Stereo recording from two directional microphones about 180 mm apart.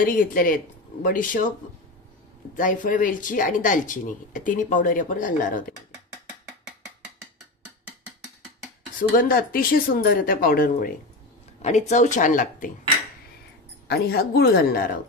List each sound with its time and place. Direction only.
0.0 s speech: 50° left (ahead or behind)
2.5 s speech: 50° left (ahead or behind)
9.1 s speech: 50° left (ahead or behind)
11.6 s speech: 40° left (ahead or behind)
13.8 s speech: 60° left (ahead or behind)